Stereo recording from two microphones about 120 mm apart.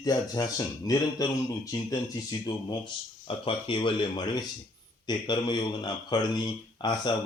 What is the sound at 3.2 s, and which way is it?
Speech, 50° left (ahead or behind).